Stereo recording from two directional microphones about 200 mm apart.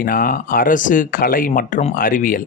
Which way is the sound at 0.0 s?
45° left (ahead or behind).